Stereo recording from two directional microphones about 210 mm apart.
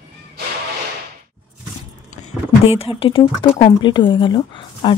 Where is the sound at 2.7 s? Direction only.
25° left (ahead or behind).